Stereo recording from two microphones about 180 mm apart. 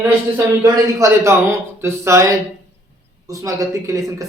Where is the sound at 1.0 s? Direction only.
20° right (ahead or behind).